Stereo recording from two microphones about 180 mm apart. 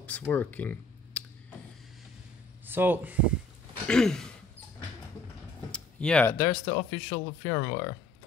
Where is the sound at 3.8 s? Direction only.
5° left (ahead or behind).